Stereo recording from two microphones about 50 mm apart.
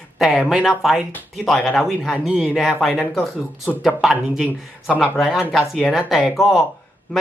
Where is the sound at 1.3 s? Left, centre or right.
Centre.